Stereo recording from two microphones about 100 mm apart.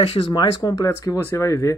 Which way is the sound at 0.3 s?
45° left (ahead or behind).